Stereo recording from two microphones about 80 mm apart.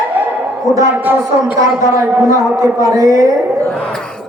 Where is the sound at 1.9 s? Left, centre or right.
Right.